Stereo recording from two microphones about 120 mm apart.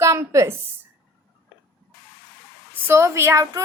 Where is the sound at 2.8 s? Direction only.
20° right (ahead or behind).